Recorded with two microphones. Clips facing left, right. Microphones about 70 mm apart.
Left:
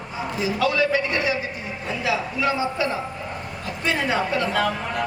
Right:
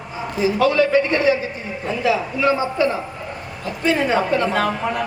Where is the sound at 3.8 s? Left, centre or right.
Right.